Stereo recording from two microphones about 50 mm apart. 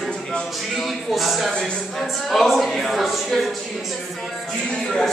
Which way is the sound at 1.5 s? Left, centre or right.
Centre.